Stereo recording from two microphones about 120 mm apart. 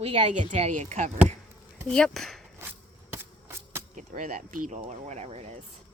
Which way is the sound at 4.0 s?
90° right.